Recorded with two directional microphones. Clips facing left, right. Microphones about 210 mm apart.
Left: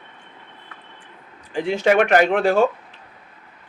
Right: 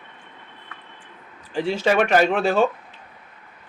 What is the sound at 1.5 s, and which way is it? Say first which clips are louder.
Speech: left 2 dB; 15° left (ahead or behind).